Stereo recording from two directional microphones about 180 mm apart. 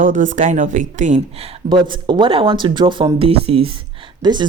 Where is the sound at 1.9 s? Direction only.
25° right (ahead or behind).